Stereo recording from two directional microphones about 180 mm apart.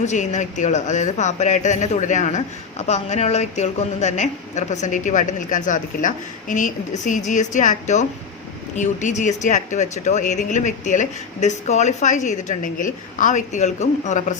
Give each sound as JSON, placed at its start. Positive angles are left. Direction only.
{"t": 0.0, "sound": "speech", "side_deg": 40}